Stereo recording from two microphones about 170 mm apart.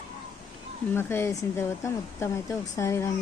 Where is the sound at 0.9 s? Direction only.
15° left (ahead or behind).